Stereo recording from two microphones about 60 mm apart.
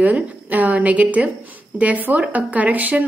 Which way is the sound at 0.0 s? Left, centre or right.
Right.